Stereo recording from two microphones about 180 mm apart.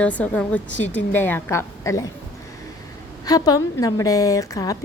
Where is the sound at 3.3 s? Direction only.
20° left (ahead or behind).